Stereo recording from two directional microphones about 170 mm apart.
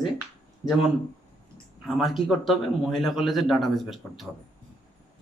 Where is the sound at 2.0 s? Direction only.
Centre (ahead or behind).